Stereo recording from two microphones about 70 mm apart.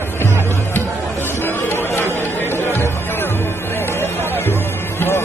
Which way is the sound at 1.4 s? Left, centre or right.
Left.